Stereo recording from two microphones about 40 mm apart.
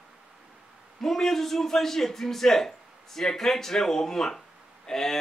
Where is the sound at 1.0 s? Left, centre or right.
Centre.